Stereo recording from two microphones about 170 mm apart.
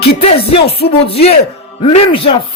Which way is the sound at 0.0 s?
35° left (ahead or behind).